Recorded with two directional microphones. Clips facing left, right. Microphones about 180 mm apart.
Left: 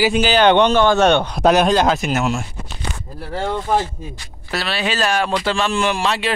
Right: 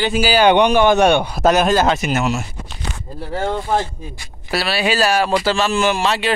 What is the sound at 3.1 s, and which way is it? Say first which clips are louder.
Speech: right 5 dB; 25° right (ahead or behind).